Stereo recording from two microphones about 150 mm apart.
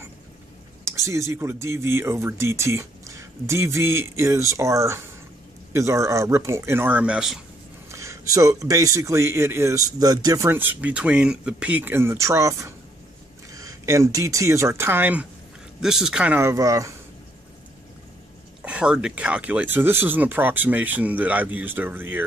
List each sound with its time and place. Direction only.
0.8 s speech: 20° right (ahead or behind)
7.9 s speech: 20° right (ahead or behind)
16.3 s speech: 20° right (ahead or behind)
18.6 s speech: 5° right (ahead or behind)